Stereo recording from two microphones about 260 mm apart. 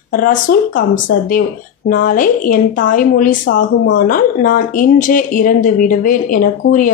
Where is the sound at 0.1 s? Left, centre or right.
Left.